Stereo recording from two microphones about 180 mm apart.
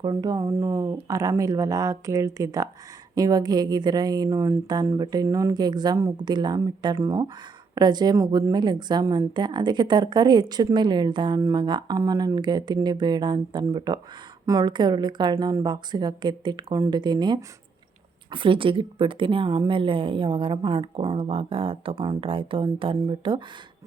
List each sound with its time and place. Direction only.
0.0 s a woman's voice: 20° right (ahead or behind)